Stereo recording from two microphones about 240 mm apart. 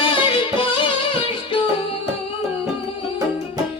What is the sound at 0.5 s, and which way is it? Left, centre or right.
Music, left.